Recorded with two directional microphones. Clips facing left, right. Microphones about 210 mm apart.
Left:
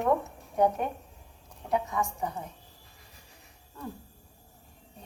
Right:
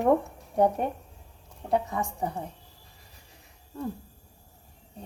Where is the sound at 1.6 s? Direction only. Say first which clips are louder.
Right 2 dB; 30° right (ahead or behind).